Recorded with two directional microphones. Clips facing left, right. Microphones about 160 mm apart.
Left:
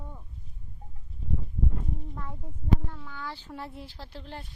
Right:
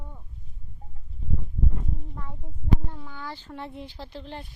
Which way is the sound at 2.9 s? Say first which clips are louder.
Right 2 dB; 20° right (ahead or behind).